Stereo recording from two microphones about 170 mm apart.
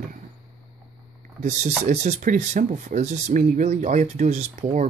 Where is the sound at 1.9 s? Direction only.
45° right (ahead or behind).